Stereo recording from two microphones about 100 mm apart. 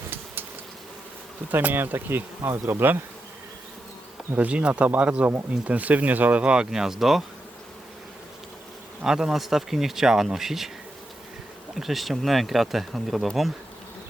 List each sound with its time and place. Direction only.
1.5 s bee: 20° right (ahead or behind)
4.3 s speech: 15° right (ahead or behind)
9.0 s speech: 5° right (ahead or behind)
11.7 s speech: centre (ahead or behind)